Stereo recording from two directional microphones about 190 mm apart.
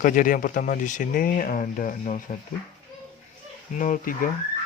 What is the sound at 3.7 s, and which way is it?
Speech, 45° left (ahead or behind).